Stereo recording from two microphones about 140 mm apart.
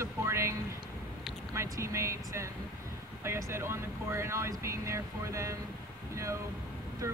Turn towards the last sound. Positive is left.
turn(degrees=-20)  # may be behind; listen again after turning